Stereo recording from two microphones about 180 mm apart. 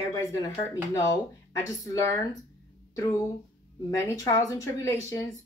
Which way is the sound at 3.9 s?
20° left (ahead or behind).